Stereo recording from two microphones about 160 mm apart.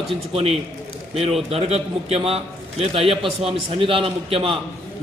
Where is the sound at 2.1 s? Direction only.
40° right (ahead or behind).